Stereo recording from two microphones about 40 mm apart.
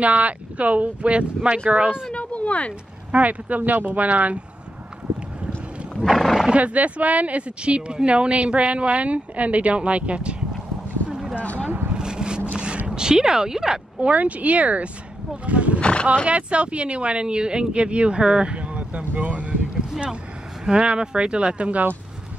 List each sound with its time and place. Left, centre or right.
0.0 s speech: right
2.1 s a sound: left
3.1 s speech: right
6.0 s horse: centre
6.5 s speech: right
11.1 s boat: centre
11.3 s a sound: left
11.9 s vehicle: centre
12.5 s a sound: right
13.9 s speech: right
15.4 s roaring cats: right
15.8 s roaring cats: left
16.3 s speech: right
20.6 s speech: right